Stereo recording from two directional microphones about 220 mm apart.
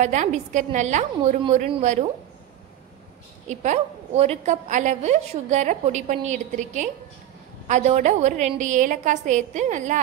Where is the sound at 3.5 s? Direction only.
35° right (ahead or behind).